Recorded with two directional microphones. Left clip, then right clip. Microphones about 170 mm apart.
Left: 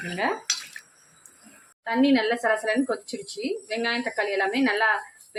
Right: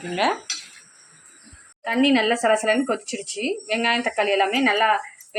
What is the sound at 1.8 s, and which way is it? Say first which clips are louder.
Speech: right 3 dB; 15° right (ahead or behind).